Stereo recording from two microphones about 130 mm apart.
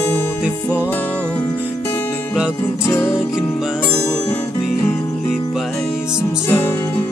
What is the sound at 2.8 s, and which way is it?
Music, 20° left (ahead or behind).